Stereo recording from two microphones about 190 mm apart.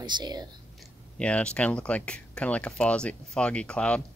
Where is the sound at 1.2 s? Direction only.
5° left (ahead or behind).